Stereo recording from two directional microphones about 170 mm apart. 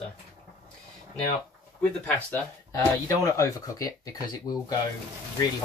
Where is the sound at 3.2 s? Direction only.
20° left (ahead or behind).